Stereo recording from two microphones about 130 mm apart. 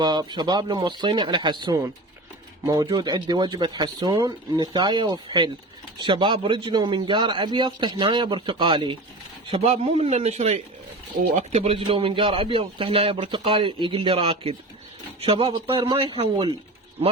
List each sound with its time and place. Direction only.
0.0 s a man's voice: 30° right (ahead or behind)
9.5 s a man's voice: 50° right (ahead or behind)